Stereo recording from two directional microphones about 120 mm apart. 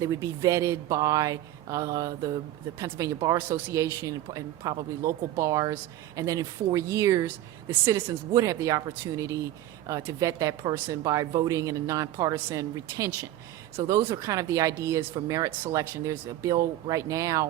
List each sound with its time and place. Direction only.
0.0 s speech: 30° right (ahead or behind)